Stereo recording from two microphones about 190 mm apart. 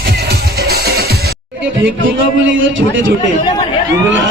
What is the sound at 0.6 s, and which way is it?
Music, 55° right (ahead or behind).